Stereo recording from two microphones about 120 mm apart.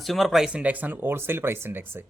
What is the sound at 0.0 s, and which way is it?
A man's voice, centre (ahead or behind).